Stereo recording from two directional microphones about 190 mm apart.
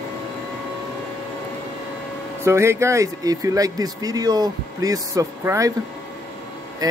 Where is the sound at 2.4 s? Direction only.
15° right (ahead or behind).